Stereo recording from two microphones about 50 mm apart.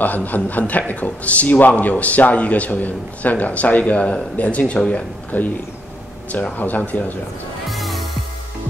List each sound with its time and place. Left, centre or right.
0.0 s a man's voice: left; by 5.0 s centre
5.3 s a man's voice: left
6.5 s a man's voice: left
7.7 s music: centre